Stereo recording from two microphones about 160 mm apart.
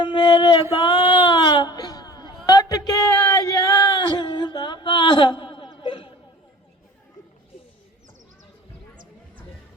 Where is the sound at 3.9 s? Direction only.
30° left (ahead or behind).